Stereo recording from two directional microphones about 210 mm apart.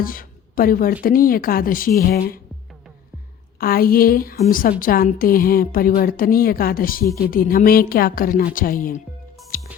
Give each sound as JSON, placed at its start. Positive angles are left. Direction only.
{"t": 0.0, "sound": "a woman's voice", "side_deg": 40}
{"t": 3.6, "sound": "a woman's voice", "side_deg": 45}
{"t": 9.5, "sound": "music", "side_deg": 40}